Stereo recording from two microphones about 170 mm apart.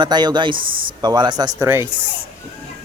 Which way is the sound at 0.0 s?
25° right (ahead or behind).